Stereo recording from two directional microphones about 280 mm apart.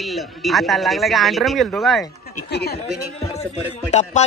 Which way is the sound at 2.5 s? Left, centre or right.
Left.